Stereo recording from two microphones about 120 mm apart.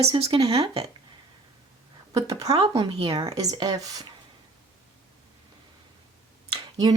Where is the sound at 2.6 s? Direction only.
45° right (ahead or behind); by 4.1 s 30° right (ahead or behind).